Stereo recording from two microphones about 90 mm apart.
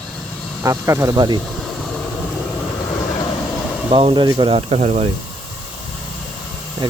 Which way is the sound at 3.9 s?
65° right (ahead or behind).